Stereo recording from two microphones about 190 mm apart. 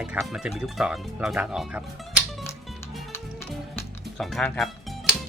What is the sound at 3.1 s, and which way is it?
Music, 10° left (ahead or behind).